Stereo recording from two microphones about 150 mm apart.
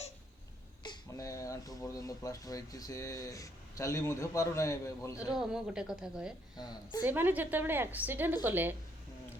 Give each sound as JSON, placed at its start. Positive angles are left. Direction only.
{"t": 0.8, "sound": "speech", "side_deg": 25}
{"t": 5.2, "sound": "a woman's voice", "side_deg": -5}
{"t": 6.6, "sound": "speech", "side_deg": 25}
{"t": 7.0, "sound": "a woman's voice", "side_deg": -15}